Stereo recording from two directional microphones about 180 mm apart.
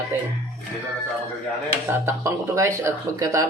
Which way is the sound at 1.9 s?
15° right (ahead or behind).